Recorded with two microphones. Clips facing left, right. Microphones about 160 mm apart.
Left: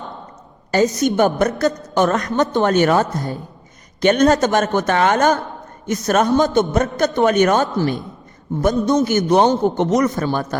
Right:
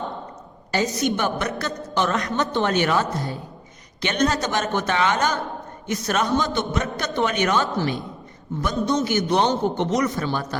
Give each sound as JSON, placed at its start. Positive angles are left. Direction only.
{"t": 0.7, "sound": "a woman's voice", "side_deg": 45}